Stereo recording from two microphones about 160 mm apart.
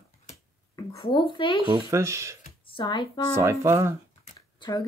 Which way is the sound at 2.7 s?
30° left (ahead or behind).